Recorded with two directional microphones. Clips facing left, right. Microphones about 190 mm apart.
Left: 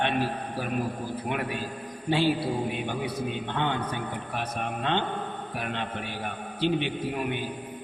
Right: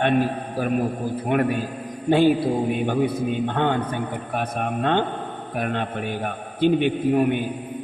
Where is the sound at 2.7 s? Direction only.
50° right (ahead or behind).